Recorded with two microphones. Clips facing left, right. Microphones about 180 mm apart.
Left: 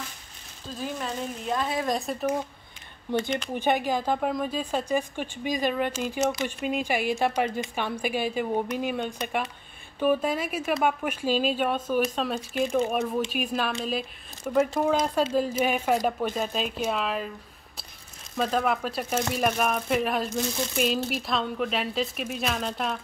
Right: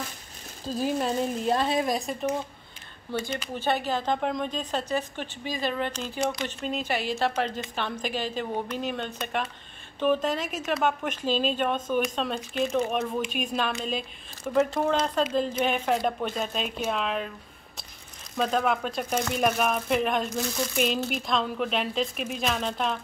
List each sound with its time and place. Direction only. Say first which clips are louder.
0.7 s speech: right 6 dB; 35° right (ahead or behind)
1.9 s speech: even; centre (ahead or behind)
3.1 s a woman's voice: left 4 dB; 15° left (ahead or behind)
18.4 s speech: even; 5° left (ahead or behind)